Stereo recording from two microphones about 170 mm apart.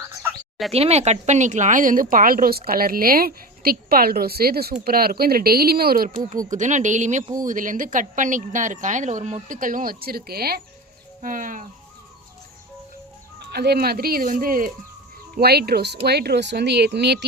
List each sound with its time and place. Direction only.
0.7 s speech: 40° right (ahead or behind); by 6.1 s 65° right (ahead or behind)
6.5 s speech: 45° right (ahead or behind); by 10.6 s 65° right (ahead or behind)
11.2 s speech: 50° right (ahead or behind)
13.4 s speech: 75° right (ahead or behind); by 14.7 s 55° right (ahead or behind)
15.4 s speech: 70° right (ahead or behind)